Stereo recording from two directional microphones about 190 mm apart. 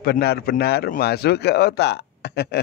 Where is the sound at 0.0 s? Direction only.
55° left (ahead or behind).